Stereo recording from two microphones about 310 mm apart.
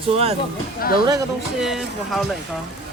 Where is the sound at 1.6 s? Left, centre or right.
Centre.